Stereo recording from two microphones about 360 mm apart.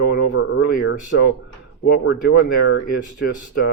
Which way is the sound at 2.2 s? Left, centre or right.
Left.